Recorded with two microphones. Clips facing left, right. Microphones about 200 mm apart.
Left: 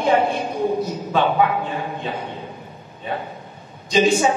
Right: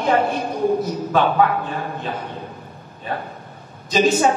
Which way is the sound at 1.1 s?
15° left (ahead or behind).